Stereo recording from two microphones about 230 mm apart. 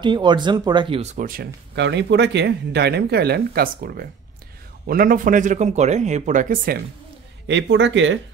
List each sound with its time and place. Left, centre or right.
0.0 s speech: centre; by 6.8 s right
7.4 s speech: right